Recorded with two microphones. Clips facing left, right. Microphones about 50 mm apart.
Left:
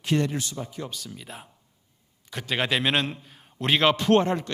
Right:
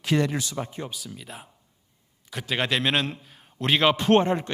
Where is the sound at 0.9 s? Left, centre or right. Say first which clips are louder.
Even; centre.